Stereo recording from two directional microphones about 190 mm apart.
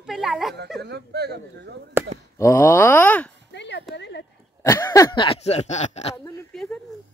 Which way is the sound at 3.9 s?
65° left (ahead or behind).